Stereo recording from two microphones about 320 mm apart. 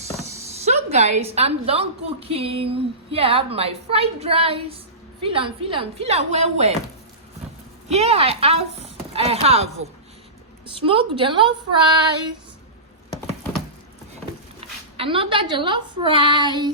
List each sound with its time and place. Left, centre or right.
0.2 s speech: centre
7.9 s speech: centre
14.6 s a sound: centre
14.9 s speech: centre